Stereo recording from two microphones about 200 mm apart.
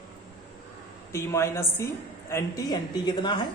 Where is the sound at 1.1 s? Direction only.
15° left (ahead or behind).